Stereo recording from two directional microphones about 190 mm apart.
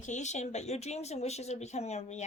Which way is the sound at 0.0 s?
40° left (ahead or behind).